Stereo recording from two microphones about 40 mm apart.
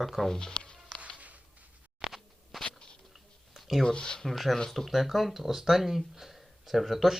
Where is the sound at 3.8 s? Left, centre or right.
Left.